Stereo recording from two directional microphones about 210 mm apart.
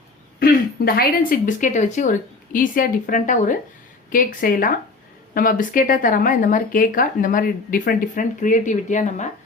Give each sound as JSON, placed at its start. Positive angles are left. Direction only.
{"t": 0.3, "sound": "speech", "side_deg": 45}